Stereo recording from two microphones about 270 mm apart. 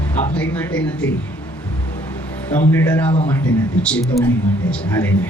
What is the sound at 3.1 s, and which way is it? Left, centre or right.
Speech, centre.